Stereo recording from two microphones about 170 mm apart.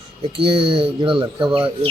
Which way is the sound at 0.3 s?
30° right (ahead or behind).